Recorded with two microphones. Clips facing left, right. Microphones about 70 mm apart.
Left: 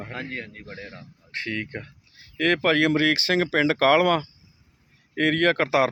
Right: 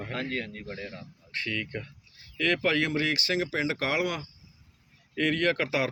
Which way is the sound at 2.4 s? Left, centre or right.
Left.